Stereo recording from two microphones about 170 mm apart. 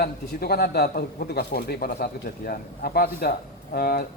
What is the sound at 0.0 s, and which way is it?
Speech, 65° left (ahead or behind).